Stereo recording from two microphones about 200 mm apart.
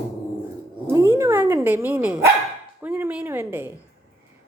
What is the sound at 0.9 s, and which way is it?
A woman's voice, 15° right (ahead or behind).